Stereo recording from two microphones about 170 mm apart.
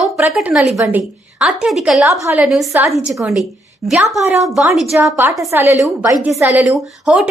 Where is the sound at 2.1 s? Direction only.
15° right (ahead or behind).